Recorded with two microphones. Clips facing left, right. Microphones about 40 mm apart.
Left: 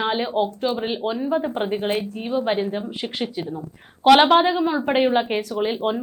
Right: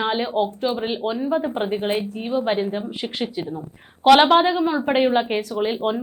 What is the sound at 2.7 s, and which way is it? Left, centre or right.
Speech, centre.